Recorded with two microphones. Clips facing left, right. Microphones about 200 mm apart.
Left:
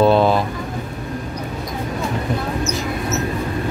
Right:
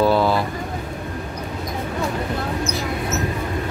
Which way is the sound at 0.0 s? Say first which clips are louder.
Left 3 dB; 20° left (ahead or behind).